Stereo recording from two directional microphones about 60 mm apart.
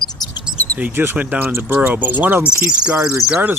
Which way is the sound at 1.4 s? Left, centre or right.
Right.